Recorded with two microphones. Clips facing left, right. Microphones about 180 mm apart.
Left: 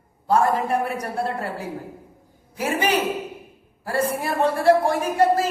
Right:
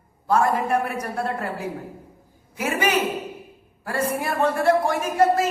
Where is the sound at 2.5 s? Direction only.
30° left (ahead or behind).